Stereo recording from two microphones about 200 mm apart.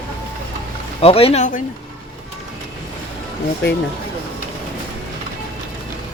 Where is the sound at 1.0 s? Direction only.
30° left (ahead or behind).